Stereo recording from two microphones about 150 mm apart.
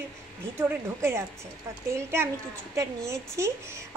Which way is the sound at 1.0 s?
15° right (ahead or behind).